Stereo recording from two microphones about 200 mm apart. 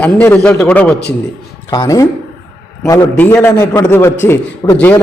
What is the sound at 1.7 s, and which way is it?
A man's voice, 15° left (ahead or behind).